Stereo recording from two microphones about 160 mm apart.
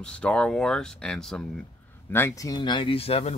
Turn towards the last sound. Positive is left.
turn(degrees=40)  # may be behind; listen again after turning